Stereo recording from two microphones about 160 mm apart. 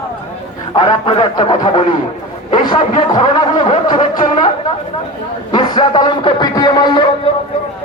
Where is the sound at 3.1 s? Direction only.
25° left (ahead or behind).